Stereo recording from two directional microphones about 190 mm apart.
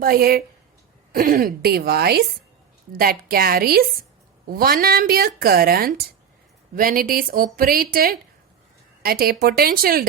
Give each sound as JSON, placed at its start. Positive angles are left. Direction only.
{"t": 0.0, "sound": "a woman's voice", "side_deg": -50}